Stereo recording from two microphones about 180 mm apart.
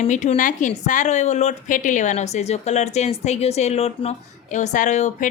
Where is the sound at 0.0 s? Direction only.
40° left (ahead or behind).